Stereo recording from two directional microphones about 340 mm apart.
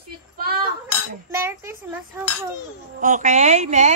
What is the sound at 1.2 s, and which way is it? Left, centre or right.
Speech, centre.